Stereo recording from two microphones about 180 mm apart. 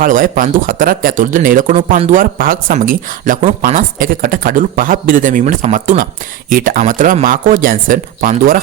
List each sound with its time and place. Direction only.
0.0 s speech: 50° right (ahead or behind)